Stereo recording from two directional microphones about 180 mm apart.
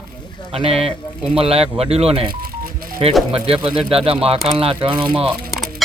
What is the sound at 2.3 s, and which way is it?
Telephone dialing, 55° right (ahead or behind).